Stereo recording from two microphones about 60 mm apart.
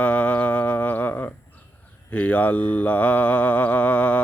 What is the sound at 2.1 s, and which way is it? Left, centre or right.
Mantra, left.